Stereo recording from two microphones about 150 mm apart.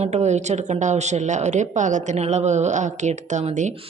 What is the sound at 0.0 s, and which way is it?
A woman's voice, 50° right (ahead or behind).